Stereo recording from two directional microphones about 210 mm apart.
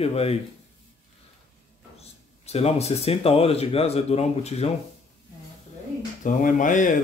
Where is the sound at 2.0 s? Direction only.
30° left (ahead or behind).